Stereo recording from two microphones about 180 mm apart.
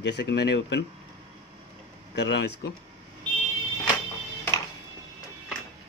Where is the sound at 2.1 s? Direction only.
70° left (ahead or behind).